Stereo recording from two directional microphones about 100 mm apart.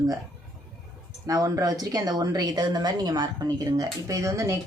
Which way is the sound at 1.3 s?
35° right (ahead or behind).